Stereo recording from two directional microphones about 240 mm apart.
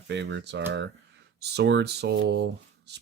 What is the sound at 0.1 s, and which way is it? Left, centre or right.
Speech, right.